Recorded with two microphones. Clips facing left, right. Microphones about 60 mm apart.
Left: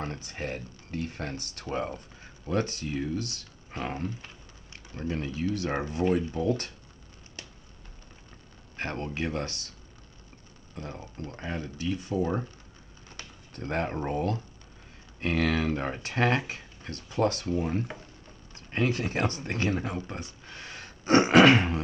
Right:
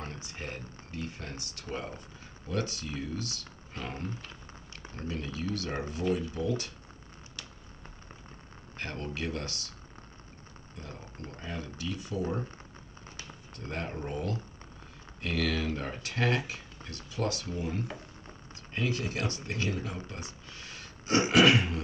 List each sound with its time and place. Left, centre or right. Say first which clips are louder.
0.0 s speech: left 5 dB; left
8.7 s speech: left 4 dB; left
10.8 s speech: left 6 dB; left
20.4 s sneeze: left 3 dB; left